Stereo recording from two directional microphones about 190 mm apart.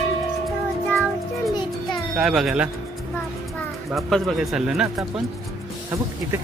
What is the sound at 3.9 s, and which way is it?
Speech, centre (ahead or behind).